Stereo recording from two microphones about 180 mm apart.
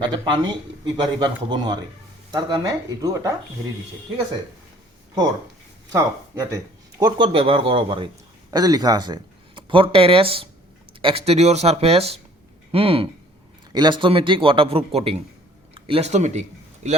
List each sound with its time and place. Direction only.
0.3 s a man's voice: 25° right (ahead or behind)
5.9 s speech: 20° right (ahead or behind)
7.0 s a man's voice: 30° right (ahead or behind)